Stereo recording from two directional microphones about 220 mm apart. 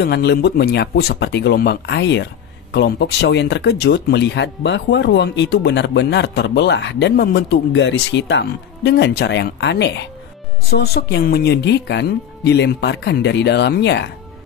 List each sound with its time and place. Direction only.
0.0 s speech: 50° left (ahead or behind)